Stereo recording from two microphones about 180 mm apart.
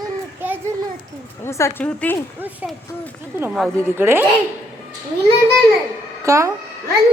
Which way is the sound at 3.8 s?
15° right (ahead or behind).